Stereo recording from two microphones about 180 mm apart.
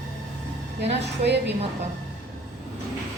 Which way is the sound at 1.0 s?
70° right (ahead or behind).